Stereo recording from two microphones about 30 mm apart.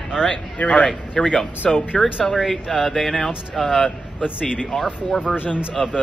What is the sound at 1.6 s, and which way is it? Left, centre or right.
Speech, left.